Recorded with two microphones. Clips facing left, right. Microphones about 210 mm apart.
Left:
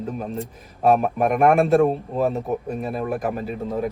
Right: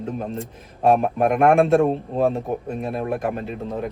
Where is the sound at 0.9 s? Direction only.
Centre (ahead or behind).